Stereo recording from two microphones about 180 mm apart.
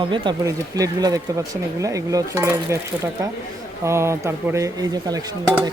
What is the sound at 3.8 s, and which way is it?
Speech, 15° right (ahead or behind).